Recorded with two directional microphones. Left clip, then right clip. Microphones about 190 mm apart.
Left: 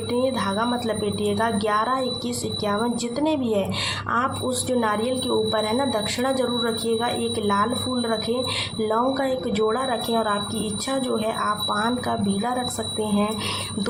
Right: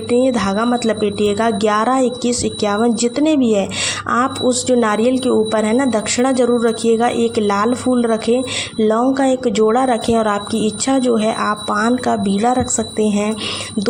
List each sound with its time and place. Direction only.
0.1 s a woman's voice: 35° right (ahead or behind)